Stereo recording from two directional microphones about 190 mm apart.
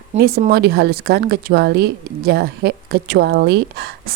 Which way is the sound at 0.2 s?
55° right (ahead or behind).